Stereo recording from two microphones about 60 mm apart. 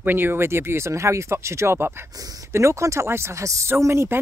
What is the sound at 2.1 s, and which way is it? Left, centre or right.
Speech, right.